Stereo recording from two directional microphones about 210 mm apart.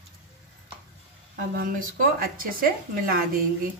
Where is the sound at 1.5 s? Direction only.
45° right (ahead or behind).